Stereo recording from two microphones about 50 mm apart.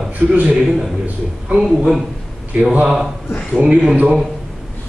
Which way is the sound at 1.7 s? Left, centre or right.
Centre.